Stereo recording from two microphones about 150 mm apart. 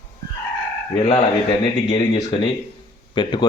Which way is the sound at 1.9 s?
25° left (ahead or behind).